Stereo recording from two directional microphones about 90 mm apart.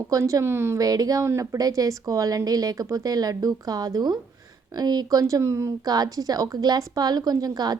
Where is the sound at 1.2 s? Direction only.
30° right (ahead or behind).